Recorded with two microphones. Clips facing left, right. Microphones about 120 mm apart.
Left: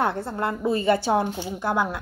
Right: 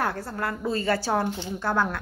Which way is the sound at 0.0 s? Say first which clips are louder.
Left 3 dB; 20° left (ahead or behind).